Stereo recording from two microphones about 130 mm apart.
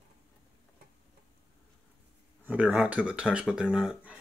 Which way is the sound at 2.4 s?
15° right (ahead or behind).